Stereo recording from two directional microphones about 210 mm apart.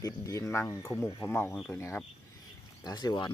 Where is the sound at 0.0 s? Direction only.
15° left (ahead or behind).